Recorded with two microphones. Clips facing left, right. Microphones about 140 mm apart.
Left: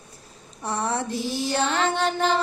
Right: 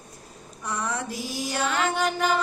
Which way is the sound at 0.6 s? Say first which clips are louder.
Left 4 dB; 30° left (ahead or behind).